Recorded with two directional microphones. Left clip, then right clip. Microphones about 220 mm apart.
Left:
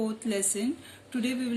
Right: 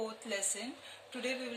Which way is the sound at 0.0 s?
25° left (ahead or behind).